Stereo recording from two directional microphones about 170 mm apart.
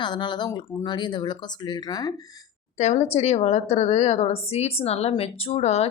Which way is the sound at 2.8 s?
40° left (ahead or behind).